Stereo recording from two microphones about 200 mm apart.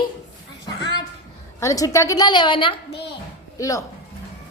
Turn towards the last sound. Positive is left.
turn(degrees=15)  # may be behind; listen again after turning